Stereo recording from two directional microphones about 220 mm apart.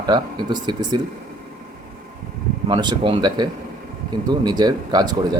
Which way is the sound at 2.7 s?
20° right (ahead or behind).